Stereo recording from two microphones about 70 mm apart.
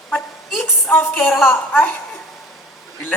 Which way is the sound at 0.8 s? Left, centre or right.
Left.